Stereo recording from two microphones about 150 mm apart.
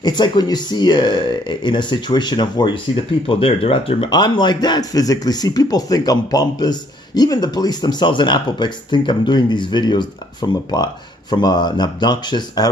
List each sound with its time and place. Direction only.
0.0 s speech: 30° left (ahead or behind)